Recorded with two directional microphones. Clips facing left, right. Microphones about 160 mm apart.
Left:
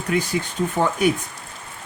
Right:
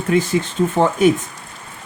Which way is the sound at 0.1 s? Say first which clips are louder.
Right 5 dB; 30° right (ahead or behind).